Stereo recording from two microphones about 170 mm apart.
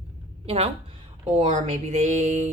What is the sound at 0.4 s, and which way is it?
Speech, 35° right (ahead or behind).